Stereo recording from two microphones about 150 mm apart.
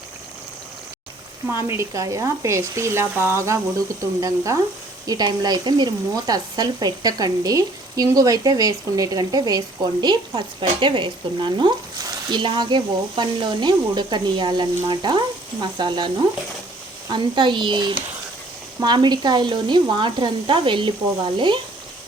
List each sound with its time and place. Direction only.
1.5 s speech: 15° right (ahead or behind); by 21.6 s 30° right (ahead or behind)